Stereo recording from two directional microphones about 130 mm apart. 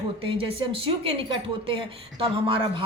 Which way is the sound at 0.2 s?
45° right (ahead or behind).